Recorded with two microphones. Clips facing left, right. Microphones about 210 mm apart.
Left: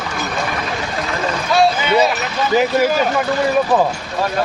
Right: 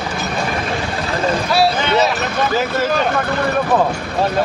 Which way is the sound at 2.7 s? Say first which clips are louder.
Left 2 dB; 10° left (ahead or behind).